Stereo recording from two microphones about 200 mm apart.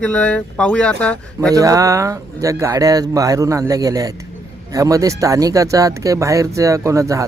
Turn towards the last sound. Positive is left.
turn(degrees=-15)  # may be behind; listen again after turning